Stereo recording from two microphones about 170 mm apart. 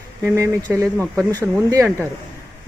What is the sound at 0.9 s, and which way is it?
Speech, 5° left (ahead or behind).